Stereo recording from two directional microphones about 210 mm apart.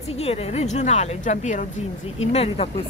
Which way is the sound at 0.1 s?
30° left (ahead or behind).